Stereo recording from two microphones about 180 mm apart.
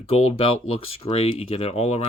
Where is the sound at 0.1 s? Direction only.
35° left (ahead or behind).